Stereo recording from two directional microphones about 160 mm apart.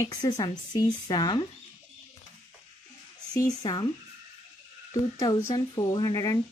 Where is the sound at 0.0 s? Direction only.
25° left (ahead or behind).